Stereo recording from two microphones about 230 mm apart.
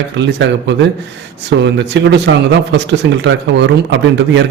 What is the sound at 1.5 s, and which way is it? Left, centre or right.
Speech, right.